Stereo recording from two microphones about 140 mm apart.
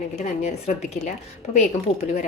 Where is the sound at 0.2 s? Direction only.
50° left (ahead or behind).